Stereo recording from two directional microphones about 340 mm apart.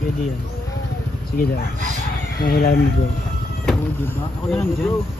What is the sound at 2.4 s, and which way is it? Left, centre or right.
Speech, left.